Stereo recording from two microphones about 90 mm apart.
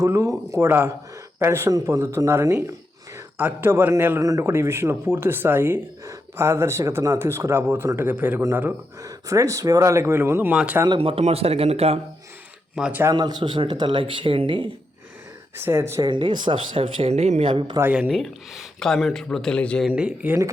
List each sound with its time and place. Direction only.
0.1 s speech: 30° right (ahead or behind)
3.3 s speech: 20° right (ahead or behind)
4.2 s speech: 35° right (ahead or behind)
10.5 s speech: 10° right (ahead or behind)
10.8 s speech: 75° right (ahead or behind)
12.8 s speech: 5° right (ahead or behind)
13.1 s speech: 55° right (ahead or behind); by 14.7 s 70° right (ahead or behind)
15.5 s speech: 30° right (ahead or behind)
16.0 s speech: 60° right (ahead or behind)
18.1 s speech: centre (ahead or behind)
19.9 s speech: 15° right (ahead or behind)